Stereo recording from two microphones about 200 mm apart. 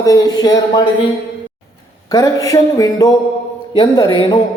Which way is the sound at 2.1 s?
15° left (ahead or behind).